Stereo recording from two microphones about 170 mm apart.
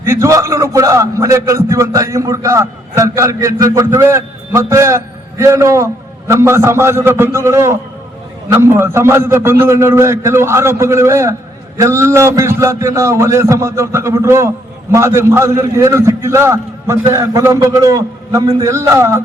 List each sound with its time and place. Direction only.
0.0 s a man's voice: 15° right (ahead or behind)